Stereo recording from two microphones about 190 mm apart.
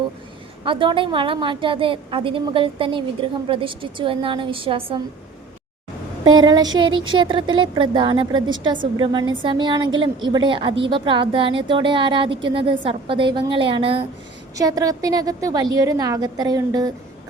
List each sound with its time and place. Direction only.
0.6 s a woman's voice: 25° right (ahead or behind)
6.2 s a woman's voice: 20° right (ahead or behind)
14.5 s a woman's voice: 20° right (ahead or behind)